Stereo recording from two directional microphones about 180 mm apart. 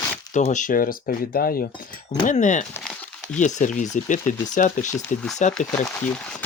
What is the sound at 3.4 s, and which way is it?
Speech, 45° left (ahead or behind).